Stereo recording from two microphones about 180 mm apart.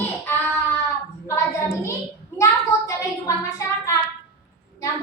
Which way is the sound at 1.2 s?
15° left (ahead or behind).